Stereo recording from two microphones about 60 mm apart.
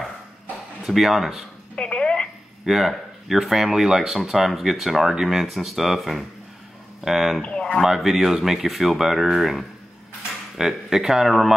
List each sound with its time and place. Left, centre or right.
0.8 s speech: centre
1.8 s telephone: centre
2.6 s speech: centre
7.4 s a sound: centre
7.8 s speech: centre